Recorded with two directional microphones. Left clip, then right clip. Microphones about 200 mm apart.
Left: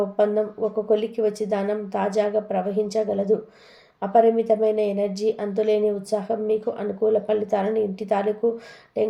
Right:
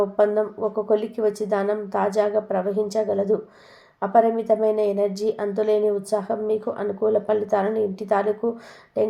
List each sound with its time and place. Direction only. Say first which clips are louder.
0.2 s a woman's voice: even; 20° right (ahead or behind)